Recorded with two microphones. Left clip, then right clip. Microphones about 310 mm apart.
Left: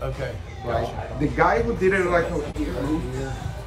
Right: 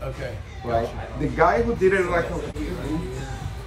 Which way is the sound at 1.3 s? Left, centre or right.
Centre.